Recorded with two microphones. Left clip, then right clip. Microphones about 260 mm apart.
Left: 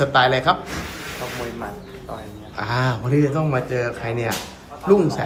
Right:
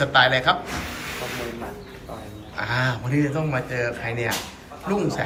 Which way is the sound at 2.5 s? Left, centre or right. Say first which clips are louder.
Left 1 dB; centre.